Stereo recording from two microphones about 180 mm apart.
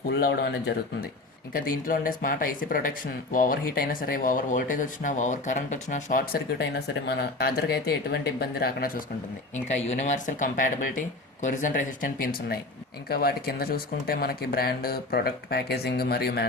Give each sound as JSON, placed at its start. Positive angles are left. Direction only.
{"t": 0.1, "sound": "speech", "side_deg": 70}
{"t": 1.5, "sound": "speech", "side_deg": 50}
{"t": 9.7, "sound": "speech", "side_deg": 40}